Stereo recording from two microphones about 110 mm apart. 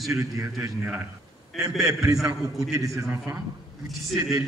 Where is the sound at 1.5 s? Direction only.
Centre (ahead or behind).